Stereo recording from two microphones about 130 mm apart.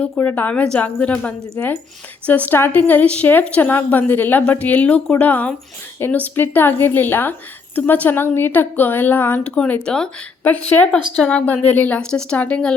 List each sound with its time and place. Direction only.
0.0 s a woman's voice: 15° left (ahead or behind)